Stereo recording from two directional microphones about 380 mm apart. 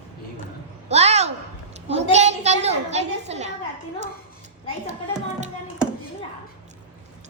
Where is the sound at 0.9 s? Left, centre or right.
Centre.